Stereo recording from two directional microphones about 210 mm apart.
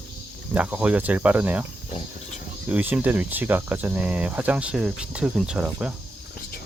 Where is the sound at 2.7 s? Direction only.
5° right (ahead or behind).